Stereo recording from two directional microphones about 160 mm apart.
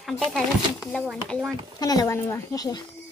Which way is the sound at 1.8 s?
20° left (ahead or behind).